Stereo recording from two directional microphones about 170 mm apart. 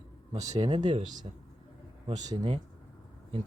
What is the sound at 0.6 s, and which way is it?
Speech, 25° right (ahead or behind).